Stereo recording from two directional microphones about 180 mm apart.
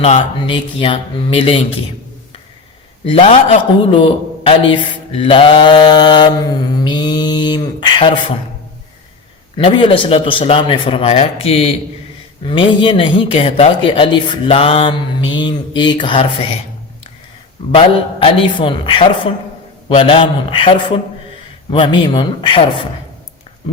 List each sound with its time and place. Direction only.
0.0 s speech: 40° left (ahead or behind)
0.3 s mantra: 30° left (ahead or behind)
3.1 s speech: 30° left (ahead or behind)
3.9 s mantra: 30° left (ahead or behind)
9.6 s mantra: 30° left (ahead or behind)
17.7 s mantra: 30° left (ahead or behind)